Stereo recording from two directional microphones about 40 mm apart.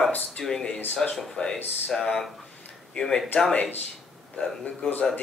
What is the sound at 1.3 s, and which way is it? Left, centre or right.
Speech, centre.